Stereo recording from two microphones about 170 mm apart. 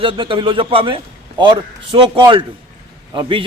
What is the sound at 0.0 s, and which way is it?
A man's voice, 30° right (ahead or behind).